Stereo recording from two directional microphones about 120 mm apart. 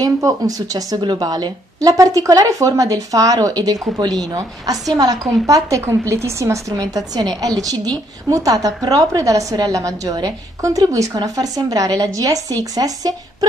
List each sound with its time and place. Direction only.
0.0 s a woman's voice: 30° right (ahead or behind)